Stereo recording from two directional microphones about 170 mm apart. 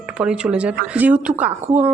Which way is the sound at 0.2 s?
5° right (ahead or behind).